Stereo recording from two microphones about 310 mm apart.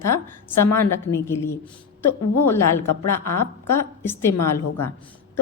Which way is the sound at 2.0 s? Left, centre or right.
Left.